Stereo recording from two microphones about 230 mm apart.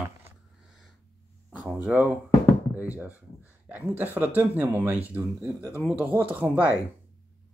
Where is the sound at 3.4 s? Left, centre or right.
Centre.